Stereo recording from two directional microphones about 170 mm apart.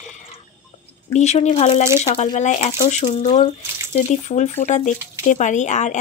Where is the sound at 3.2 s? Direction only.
25° left (ahead or behind).